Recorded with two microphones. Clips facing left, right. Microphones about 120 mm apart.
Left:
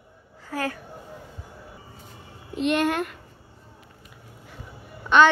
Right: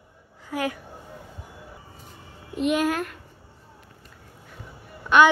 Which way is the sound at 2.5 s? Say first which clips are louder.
Even; 5° right (ahead or behind).